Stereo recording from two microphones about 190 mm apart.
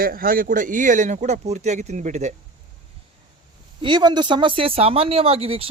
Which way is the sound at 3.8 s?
25° right (ahead or behind).